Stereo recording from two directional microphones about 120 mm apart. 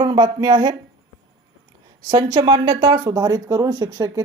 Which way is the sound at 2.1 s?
35° right (ahead or behind).